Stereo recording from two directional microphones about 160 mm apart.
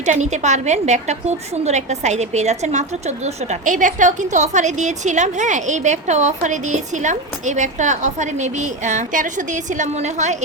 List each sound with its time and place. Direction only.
0.0 s a woman's voice: 45° right (ahead or behind)